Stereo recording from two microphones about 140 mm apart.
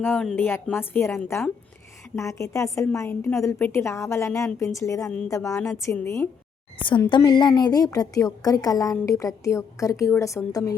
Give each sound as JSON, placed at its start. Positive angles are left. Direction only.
{"t": 0.0, "sound": "a woman's voice", "side_deg": 15}
{"t": 7.2, "sound": "a woman's voice", "side_deg": 30}